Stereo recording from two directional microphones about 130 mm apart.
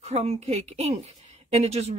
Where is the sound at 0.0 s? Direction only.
55° right (ahead or behind).